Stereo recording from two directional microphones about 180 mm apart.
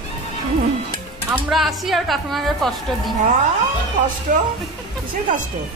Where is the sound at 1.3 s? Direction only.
Centre (ahead or behind).